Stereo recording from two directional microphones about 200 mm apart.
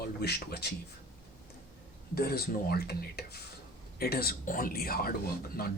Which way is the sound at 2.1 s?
50° left (ahead or behind).